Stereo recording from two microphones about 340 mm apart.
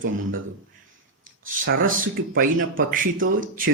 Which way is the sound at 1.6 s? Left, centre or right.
Right.